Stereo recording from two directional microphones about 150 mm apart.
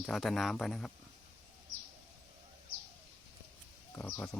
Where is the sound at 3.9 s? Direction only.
15° left (ahead or behind).